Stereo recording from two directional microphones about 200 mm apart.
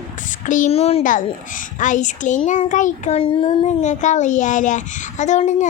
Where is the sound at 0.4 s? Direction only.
40° left (ahead or behind).